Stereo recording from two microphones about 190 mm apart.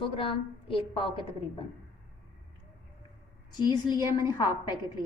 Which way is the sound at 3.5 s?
20° left (ahead or behind).